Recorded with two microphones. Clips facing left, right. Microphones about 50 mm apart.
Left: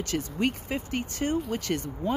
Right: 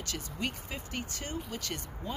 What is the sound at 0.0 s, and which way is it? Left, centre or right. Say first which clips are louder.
Speech: left 9 dB; left.